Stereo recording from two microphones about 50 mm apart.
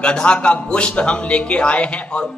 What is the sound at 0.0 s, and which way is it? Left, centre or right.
A man's voice, centre.